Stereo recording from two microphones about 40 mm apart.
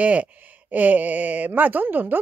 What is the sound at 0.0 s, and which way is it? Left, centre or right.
A woman's voice, right.